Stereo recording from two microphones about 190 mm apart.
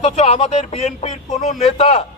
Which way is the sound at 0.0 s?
35° left (ahead or behind).